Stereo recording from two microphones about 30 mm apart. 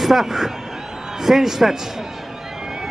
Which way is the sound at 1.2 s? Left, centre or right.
Centre.